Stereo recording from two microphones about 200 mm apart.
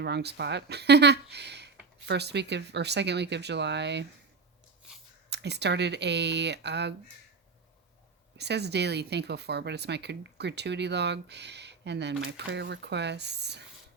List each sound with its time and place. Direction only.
0.0 s speech: 55° right (ahead or behind)
5.3 s speech: 60° right (ahead or behind)
8.4 s speech: 55° right (ahead or behind)